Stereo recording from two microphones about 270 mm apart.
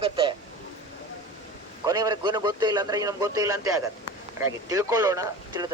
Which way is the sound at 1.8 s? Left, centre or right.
Centre.